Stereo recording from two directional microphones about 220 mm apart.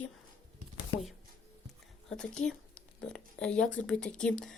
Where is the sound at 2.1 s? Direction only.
5° left (ahead or behind).